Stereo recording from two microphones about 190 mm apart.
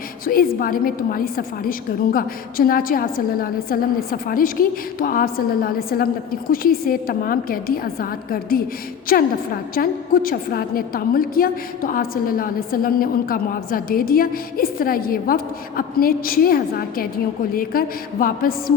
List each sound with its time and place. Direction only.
0.3 s a woman's voice: 50° left (ahead or behind)